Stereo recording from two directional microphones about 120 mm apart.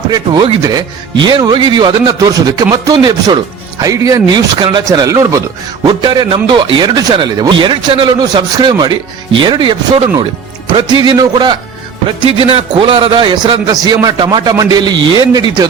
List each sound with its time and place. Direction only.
0.1 s speech: 40° right (ahead or behind)
5.8 s speech: 40° right (ahead or behind)
11.0 s speech: 35° right (ahead or behind)
12.0 s speech: 45° right (ahead or behind)